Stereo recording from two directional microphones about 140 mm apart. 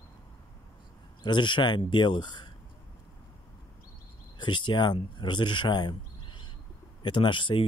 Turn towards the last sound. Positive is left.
turn(degrees=35)  # may be behind; listen again after turning